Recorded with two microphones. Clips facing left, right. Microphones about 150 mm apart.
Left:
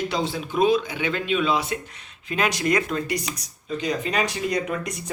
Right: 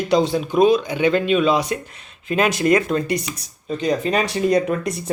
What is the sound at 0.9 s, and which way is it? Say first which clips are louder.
Speech: right 8 dB; 45° right (ahead or behind).